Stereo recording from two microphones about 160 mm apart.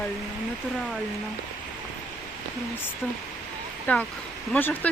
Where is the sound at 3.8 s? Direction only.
10° left (ahead or behind).